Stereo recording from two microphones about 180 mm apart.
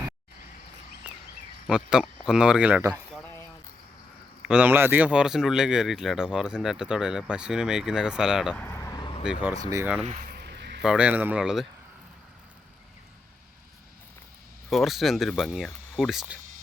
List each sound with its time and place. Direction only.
1.6 s speech: 5° right (ahead or behind)
4.4 s speech: 10° right (ahead or behind)
8.5 s vehicle: 10° left (ahead or behind)
9.4 s speech: 15° right (ahead or behind)
10.1 s a sound: 50° right (ahead or behind); by 10.8 s 65° right (ahead or behind)
10.8 s speech: 5° right (ahead or behind)
14.7 s speech: centre (ahead or behind)